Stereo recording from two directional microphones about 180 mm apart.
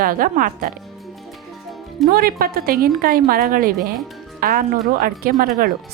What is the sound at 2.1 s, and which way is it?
A woman's voice, 55° right (ahead or behind).